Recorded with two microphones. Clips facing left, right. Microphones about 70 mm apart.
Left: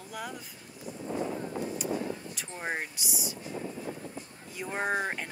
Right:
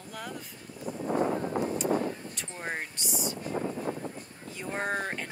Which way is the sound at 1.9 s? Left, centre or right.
Right.